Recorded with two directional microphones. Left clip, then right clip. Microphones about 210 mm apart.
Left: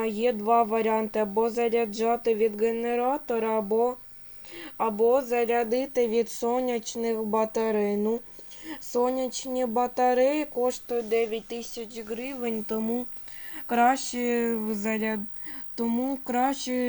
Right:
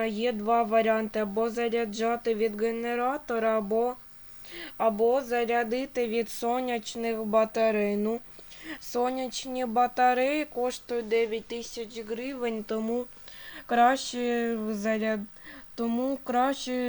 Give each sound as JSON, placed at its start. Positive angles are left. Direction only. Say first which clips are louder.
{"t": 0.0, "sound": "speech", "louder": "left 2 dB", "side_deg": -10}
{"t": 12.4, "sound": "speech", "louder": "even", "side_deg": -25}
{"t": 13.7, "sound": "speech", "louder": "even", "side_deg": -10}